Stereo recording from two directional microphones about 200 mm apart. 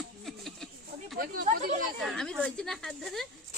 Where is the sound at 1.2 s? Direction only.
45° right (ahead or behind).